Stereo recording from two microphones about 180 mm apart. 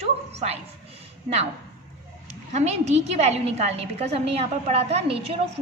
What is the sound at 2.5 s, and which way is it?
A woman's voice, 40° right (ahead or behind).